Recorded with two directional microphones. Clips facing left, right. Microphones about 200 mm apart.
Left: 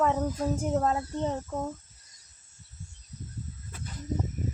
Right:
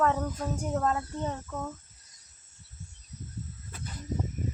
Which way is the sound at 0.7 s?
20° left (ahead or behind).